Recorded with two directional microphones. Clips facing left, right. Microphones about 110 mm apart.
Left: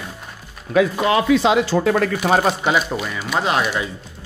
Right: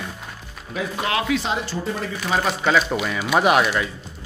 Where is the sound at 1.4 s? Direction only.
90° left; by 2.2 s 70° left (ahead or behind).